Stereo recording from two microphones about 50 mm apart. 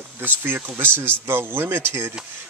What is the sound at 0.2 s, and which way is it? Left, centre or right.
Speech, right.